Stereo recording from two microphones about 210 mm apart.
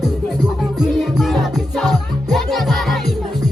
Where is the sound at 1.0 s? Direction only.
Centre (ahead or behind).